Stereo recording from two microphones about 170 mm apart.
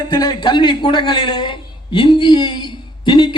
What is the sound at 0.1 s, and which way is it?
A man's voice, 25° left (ahead or behind).